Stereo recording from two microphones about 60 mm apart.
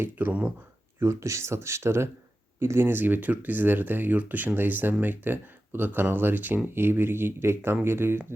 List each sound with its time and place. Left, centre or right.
0.0 s speech: right
0.9 s speech: right